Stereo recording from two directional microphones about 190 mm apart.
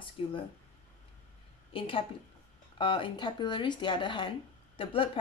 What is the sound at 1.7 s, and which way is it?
Speech, 30° left (ahead or behind).